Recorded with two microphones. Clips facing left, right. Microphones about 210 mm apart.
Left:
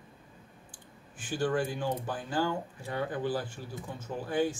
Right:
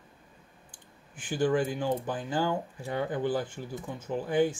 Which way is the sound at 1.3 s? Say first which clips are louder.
Right 3 dB; 15° right (ahead or behind).